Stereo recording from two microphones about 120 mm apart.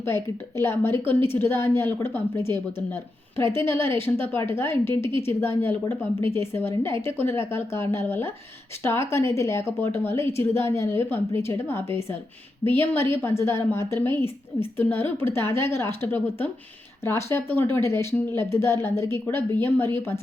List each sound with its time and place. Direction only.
0.0 s a woman's voice: 20° left (ahead or behind)